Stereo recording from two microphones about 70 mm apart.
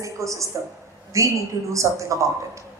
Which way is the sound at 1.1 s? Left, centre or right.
Right.